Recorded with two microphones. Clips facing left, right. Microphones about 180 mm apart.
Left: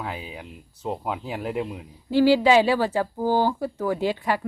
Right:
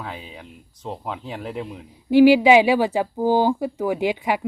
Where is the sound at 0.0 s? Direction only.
10° left (ahead or behind).